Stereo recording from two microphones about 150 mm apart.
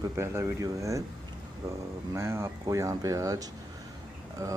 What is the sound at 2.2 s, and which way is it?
Speech, 15° right (ahead or behind).